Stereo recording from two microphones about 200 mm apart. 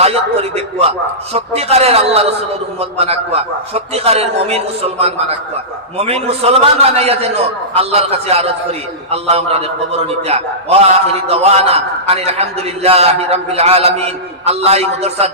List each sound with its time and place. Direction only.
0.0 s a man's voice: 30° right (ahead or behind)